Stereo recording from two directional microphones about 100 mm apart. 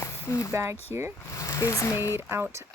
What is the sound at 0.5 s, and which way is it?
Speech, 25° right (ahead or behind).